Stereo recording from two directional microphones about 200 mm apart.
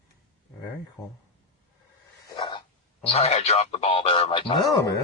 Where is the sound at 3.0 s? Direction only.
30° left (ahead or behind).